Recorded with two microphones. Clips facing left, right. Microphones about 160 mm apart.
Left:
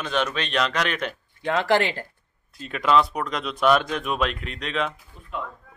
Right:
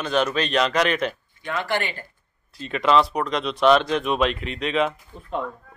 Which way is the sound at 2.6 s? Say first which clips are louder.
Right 1 dB; centre (ahead or behind).